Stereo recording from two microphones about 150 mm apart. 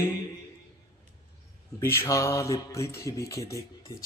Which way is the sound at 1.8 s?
15° left (ahead or behind).